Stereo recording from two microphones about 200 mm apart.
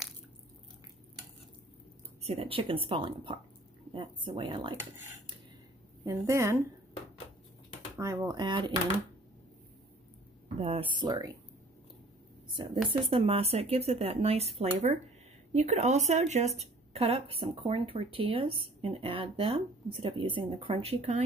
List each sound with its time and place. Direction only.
2.2 s a woman's voice: 30° right (ahead or behind)
6.0 s a woman's voice: 15° right (ahead or behind)
8.0 s a woman's voice: 15° right (ahead or behind)
10.6 s a woman's voice: 30° right (ahead or behind)
12.7 s speech: centre (ahead or behind)
13.1 s a woman's voice: 30° right (ahead or behind)